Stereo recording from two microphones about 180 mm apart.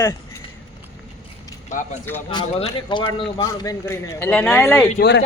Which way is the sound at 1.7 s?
40° left (ahead or behind).